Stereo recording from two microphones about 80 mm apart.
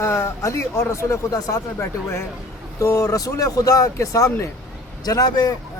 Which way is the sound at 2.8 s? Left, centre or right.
Left.